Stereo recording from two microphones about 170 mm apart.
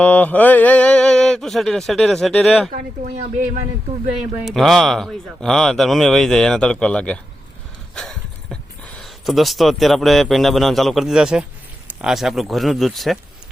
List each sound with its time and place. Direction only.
0.0 s speech: 10° left (ahead or behind)
2.7 s speech: 45° right (ahead or behind)
4.1 s speech: 5° right (ahead or behind)